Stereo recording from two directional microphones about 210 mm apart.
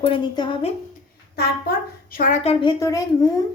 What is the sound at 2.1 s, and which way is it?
A woman's voice, 40° left (ahead or behind).